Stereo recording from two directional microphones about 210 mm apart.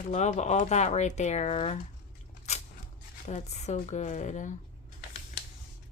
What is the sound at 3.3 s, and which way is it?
Speech, 35° left (ahead or behind).